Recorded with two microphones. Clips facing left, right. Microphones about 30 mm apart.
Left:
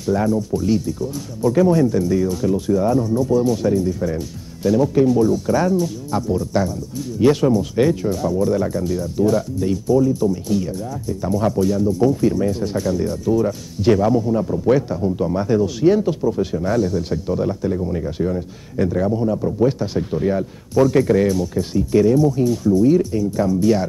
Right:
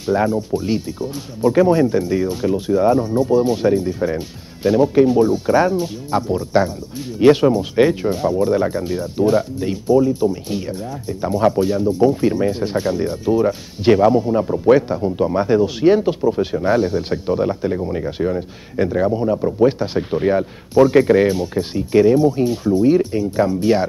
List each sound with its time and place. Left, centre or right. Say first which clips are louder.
0.0 s speech: right 1 dB; right